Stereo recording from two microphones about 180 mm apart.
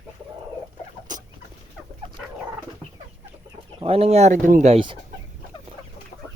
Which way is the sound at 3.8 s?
35° right (ahead or behind).